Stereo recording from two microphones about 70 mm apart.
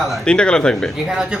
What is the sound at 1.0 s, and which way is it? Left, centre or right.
Speech, centre.